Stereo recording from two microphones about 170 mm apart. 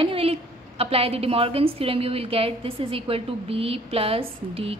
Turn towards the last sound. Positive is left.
turn(degrees=-35)  # may be behind; listen again after turning